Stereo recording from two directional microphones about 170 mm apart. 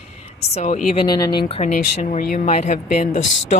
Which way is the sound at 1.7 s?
50° left (ahead or behind).